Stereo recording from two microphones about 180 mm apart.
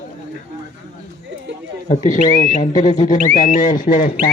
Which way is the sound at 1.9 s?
45° left (ahead or behind).